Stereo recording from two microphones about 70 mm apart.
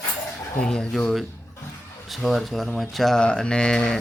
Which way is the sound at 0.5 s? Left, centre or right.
Centre.